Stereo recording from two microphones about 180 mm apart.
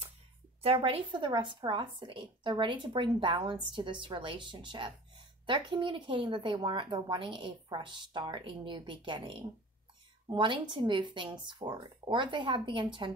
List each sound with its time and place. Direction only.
0.6 s a woman's voice: 30° right (ahead or behind)